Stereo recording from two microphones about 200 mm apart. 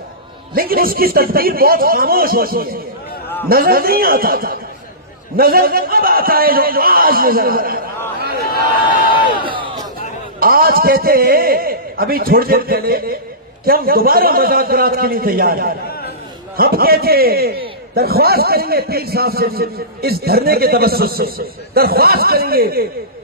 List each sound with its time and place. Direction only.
0.6 s a man's voice: 50° right (ahead or behind)
8.2 s a sound: 50° right (ahead or behind)
10.4 s a man's voice: 45° right (ahead or behind)